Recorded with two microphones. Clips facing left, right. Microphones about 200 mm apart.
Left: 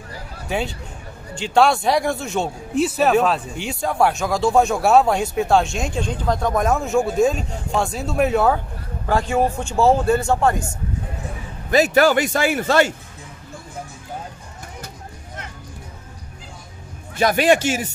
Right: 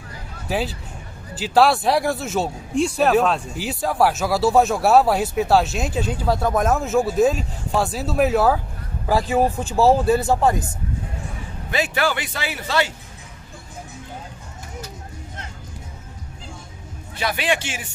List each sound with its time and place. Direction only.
0.5 s speech: centre (ahead or behind)
9.7 s speech: 35° right (ahead or behind)
10.1 s speech: 5° right (ahead or behind)
11.7 s speech: 40° left (ahead or behind)
17.2 s speech: 45° left (ahead or behind)